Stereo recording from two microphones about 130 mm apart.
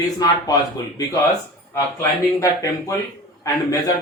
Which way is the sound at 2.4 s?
25° left (ahead or behind).